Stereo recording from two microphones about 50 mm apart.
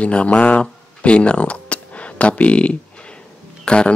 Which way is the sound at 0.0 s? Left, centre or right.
Left.